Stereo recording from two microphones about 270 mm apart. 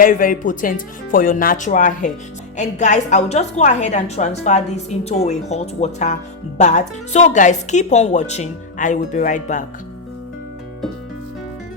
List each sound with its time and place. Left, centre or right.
0.0 s a woman's voice: left